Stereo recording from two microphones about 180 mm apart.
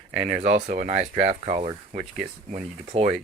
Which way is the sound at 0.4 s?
40° right (ahead or behind).